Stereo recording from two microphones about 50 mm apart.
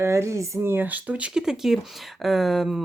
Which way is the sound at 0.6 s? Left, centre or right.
Right.